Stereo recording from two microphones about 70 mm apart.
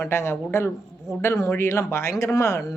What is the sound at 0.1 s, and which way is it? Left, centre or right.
A woman's voice, left.